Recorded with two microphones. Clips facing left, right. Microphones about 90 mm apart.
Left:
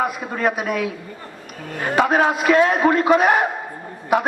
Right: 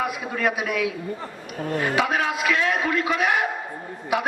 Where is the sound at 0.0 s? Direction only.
40° left (ahead or behind).